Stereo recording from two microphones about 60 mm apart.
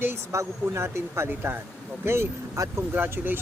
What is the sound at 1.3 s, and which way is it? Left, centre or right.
Speech, right.